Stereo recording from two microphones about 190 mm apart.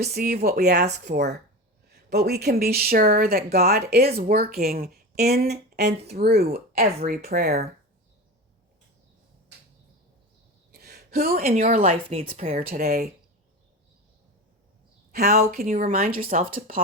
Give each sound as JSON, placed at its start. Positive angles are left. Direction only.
{"t": 0.0, "sound": "speech", "side_deg": -55}
{"t": 10.7, "sound": "a sound", "side_deg": -55}
{"t": 11.4, "sound": "speech", "side_deg": -45}
{"t": 11.8, "sound": "speech", "side_deg": -30}
{"t": 12.5, "sound": "speech", "side_deg": -50}
{"t": 15.1, "sound": "speech", "side_deg": -55}
{"t": 15.5, "sound": "speech", "side_deg": -45}